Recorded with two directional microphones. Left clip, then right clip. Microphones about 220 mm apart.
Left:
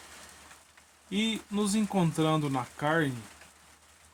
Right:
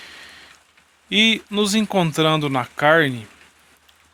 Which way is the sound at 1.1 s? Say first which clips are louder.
Right 15 dB; 35° right (ahead or behind).